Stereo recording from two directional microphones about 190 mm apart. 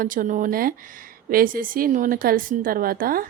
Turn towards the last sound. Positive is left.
turn(degrees=-50)  # may be behind; listen again after turning